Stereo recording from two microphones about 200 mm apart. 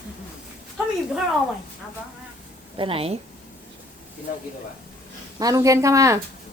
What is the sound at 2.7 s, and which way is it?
Speech, 25° right (ahead or behind).